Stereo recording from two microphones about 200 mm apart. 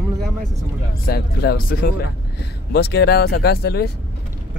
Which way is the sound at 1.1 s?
50° left (ahead or behind).